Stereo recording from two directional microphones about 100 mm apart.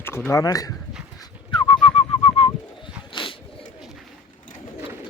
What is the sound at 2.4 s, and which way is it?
Bird, 80° left.